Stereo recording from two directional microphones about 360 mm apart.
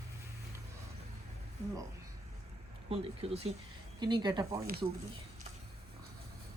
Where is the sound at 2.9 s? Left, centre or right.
Centre.